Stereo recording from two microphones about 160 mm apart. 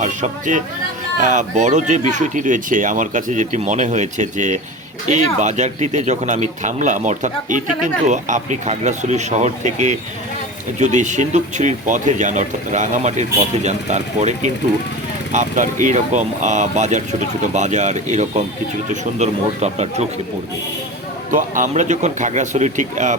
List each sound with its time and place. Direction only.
0.0 s speech: 50° right (ahead or behind)
21.2 s speech: 55° right (ahead or behind)